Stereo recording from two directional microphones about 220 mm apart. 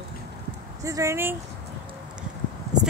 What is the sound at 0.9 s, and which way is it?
Speech, 15° right (ahead or behind).